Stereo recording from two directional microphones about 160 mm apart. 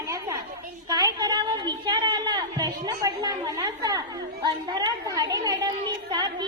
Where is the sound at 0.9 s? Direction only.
25° right (ahead or behind).